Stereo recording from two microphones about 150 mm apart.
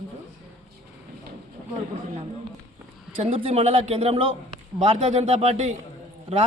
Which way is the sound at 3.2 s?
40° right (ahead or behind).